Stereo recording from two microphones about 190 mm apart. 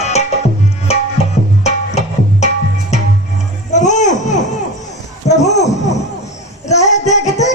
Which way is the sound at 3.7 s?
40° left (ahead or behind).